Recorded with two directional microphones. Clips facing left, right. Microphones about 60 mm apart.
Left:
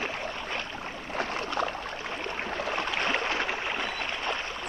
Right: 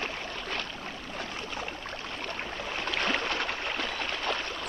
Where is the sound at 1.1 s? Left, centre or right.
Left.